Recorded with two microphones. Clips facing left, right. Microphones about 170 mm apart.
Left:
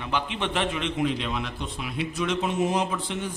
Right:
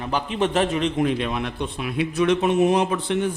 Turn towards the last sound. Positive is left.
turn(degrees=-60)  # may be behind; listen again after turning